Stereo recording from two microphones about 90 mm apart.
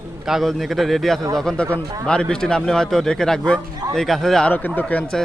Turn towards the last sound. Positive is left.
turn(degrees=20)  # may be behind; listen again after turning